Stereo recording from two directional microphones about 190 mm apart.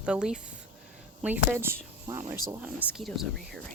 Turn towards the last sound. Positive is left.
turn(degrees=0)  # may be behind; listen again after turning